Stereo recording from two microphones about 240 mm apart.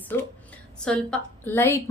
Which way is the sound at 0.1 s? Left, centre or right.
Centre.